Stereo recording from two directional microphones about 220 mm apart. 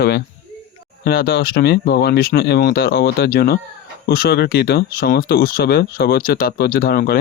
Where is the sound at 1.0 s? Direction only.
45° left (ahead or behind).